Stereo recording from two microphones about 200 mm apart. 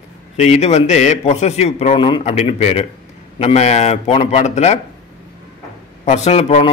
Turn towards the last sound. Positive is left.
turn(degrees=30)  # may be behind; listen again after turning